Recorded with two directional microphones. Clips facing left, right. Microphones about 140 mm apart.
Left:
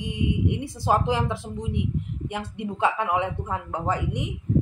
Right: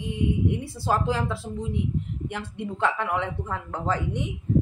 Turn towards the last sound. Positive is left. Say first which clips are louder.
# even
turn(degrees=15)  # may be behind; listen again after turning